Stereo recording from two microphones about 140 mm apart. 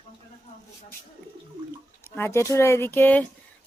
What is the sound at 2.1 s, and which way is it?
Speech, 15° left (ahead or behind).